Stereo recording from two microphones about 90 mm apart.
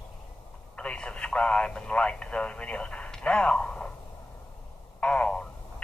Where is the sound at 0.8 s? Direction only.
10° left (ahead or behind).